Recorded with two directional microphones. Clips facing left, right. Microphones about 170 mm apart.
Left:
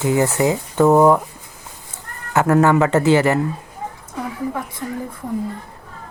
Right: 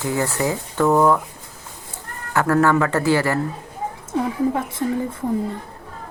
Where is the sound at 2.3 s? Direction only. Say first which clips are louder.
Left 3 dB; 20° left (ahead or behind).